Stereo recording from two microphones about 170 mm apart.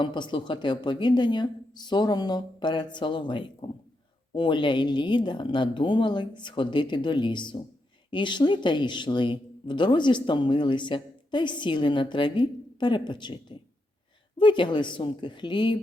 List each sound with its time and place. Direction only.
0.0 s speech: 25° left (ahead or behind)